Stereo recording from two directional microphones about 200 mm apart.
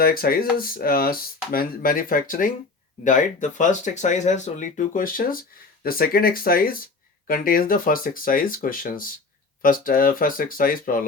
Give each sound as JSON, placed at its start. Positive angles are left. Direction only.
{"t": 0.0, "sound": "speech", "side_deg": 50}